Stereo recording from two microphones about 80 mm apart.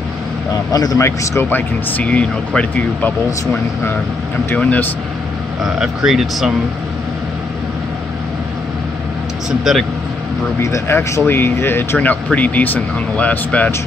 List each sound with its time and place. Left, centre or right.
0.7 s a man's voice: left
1.0 s speech: left
4.6 s speech: centre
5.6 s speech: centre
9.7 s speech: centre
10.6 s speech: left; by 13.7 s centre